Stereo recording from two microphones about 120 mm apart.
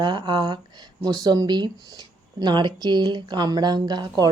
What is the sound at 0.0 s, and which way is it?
Speech, 40° right (ahead or behind).